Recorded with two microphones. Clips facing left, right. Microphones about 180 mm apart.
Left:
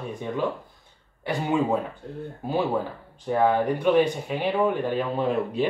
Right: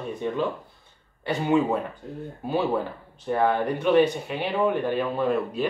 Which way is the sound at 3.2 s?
10° left (ahead or behind).